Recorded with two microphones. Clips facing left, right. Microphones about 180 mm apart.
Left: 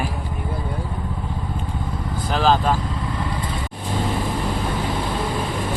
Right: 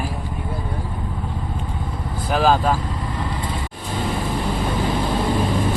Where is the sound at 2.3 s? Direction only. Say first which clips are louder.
Right 1 dB; 10° right (ahead or behind).